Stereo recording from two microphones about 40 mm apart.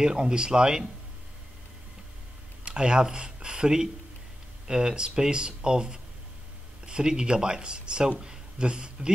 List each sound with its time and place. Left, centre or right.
0.0 s speech: centre
2.6 s speech: right